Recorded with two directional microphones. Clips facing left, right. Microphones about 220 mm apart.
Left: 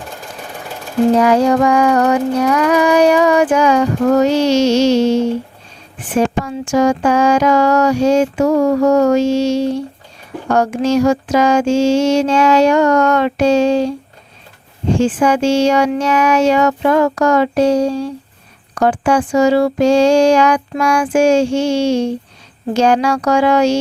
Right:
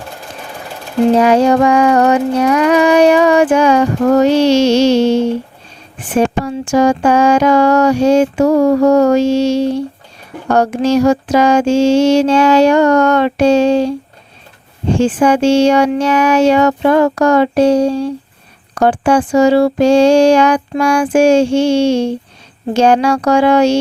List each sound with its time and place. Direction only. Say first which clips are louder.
1.1 s speech: right 3 dB; 25° right (ahead or behind)
6.1 s a sound: right 2 dB; 30° right (ahead or behind)
14.9 s speech: right 2 dB; 30° right (ahead or behind)